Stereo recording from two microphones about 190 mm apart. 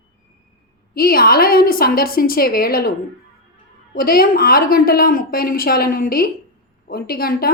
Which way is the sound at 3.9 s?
50° left (ahead or behind).